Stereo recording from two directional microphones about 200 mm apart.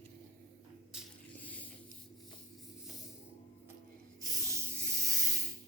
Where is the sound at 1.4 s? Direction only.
10° left (ahead or behind).